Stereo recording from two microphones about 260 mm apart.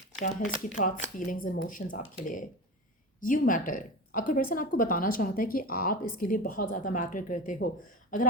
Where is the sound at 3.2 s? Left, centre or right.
Left.